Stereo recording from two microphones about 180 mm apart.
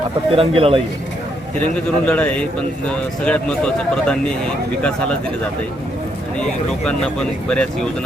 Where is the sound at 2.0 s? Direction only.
5° left (ahead or behind).